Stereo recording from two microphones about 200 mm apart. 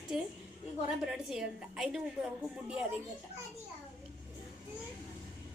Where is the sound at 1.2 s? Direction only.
Centre (ahead or behind).